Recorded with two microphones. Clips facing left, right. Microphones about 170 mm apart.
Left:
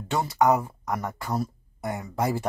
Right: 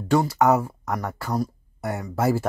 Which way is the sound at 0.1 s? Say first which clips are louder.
Right 3 dB; centre (ahead or behind).